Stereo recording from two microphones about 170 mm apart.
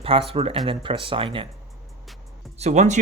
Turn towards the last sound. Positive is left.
turn(degrees=-45)  # may be behind; listen again after turning